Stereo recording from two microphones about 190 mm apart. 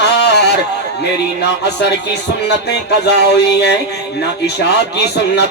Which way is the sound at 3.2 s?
60° left (ahead or behind).